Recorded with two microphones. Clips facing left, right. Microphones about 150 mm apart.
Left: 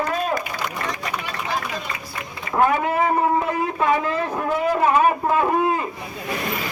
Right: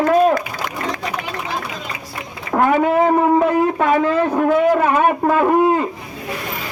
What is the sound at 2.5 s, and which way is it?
Speech, 55° right (ahead or behind).